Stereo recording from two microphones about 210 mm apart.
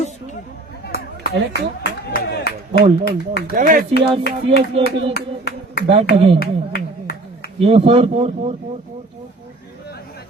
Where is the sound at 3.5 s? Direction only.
40° right (ahead or behind).